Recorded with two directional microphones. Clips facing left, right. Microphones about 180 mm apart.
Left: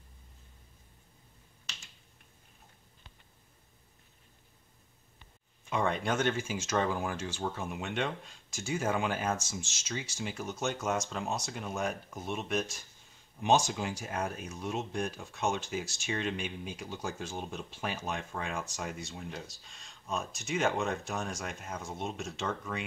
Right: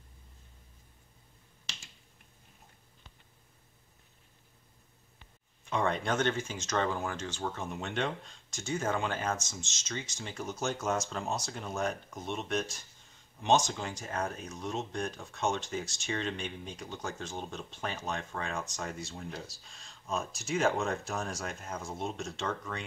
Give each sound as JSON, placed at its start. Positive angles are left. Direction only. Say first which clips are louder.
{"t": 5.7, "sound": "speech", "louder": "even", "side_deg": 5}